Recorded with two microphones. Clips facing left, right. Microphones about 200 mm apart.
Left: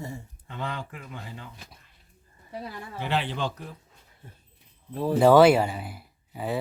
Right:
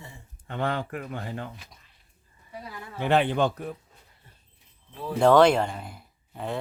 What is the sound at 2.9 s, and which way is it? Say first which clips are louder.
Speech: right 7 dB; 55° right (ahead or behind).